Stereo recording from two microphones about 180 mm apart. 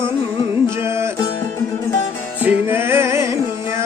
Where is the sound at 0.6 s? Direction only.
15° right (ahead or behind).